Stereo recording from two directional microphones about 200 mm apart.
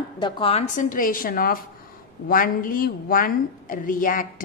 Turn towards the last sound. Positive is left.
turn(degrees=40)  # may be behind; listen again after turning